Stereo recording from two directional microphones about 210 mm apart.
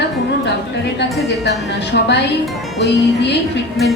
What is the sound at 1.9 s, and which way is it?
A woman's voice, 50° left (ahead or behind).